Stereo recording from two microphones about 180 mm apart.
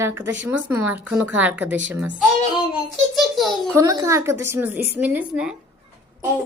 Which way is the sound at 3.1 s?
Centre (ahead or behind).